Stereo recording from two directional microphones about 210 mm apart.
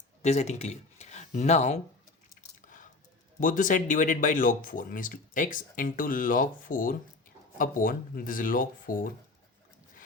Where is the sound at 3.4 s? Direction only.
40° left (ahead or behind).